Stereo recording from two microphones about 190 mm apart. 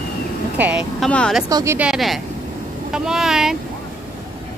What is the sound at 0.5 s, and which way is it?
Speech, 10° right (ahead or behind).